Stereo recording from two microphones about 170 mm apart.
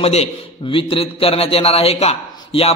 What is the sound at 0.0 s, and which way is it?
A man's voice, 35° left (ahead or behind).